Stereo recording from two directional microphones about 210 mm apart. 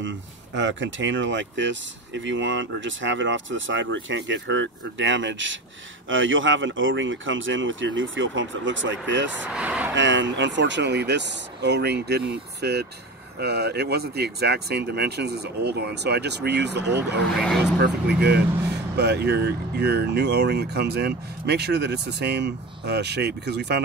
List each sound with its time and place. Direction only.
0.6 s speech: 60° right (ahead or behind)
9.5 s speech: 5° right (ahead or behind)
9.9 s speech: 60° right (ahead or behind)
17.4 s speech: centre (ahead or behind)
17.7 s speech: 50° right (ahead or behind)